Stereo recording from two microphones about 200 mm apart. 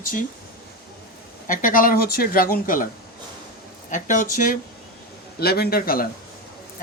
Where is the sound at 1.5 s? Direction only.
45° left (ahead or behind).